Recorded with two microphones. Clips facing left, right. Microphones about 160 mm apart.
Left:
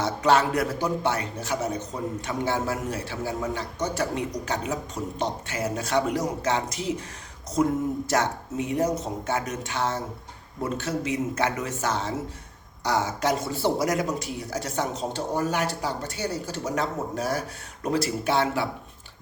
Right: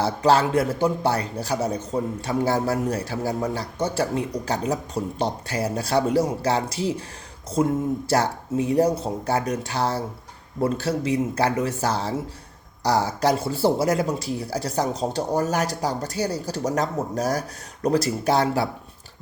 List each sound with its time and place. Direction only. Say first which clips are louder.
0.0 s a man's voice: right 2 dB; 30° right (ahead or behind)